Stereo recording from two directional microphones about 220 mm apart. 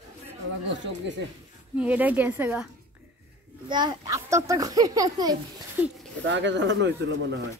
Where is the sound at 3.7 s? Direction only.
20° right (ahead or behind).